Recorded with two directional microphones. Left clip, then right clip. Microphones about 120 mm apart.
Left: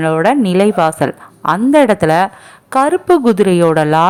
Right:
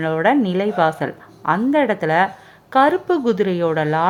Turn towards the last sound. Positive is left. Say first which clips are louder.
# left 8 dB
turn(degrees=50)  # may be behind; listen again after turning